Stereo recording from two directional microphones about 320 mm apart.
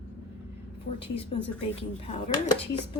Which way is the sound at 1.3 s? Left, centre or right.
Centre.